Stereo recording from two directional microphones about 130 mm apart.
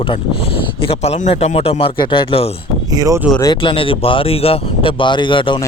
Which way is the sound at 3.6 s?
45° left (ahead or behind).